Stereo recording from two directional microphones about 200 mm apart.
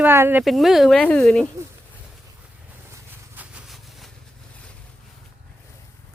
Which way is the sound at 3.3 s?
5° right (ahead or behind).